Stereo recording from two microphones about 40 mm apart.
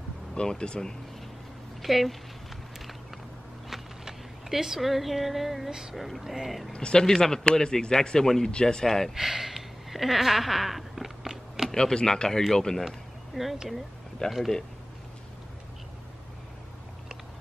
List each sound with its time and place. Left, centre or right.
0.3 s speech: left
1.8 s speech: centre
3.7 s a sound: centre
5.7 s speech: centre
5.9 s speech: centre
6.7 s speech: left
7.2 s speech: centre
8.8 s speech: centre
9.1 s a sound: centre
11.7 s speech: centre
12.8 s a sound: centre
14.2 s speech: centre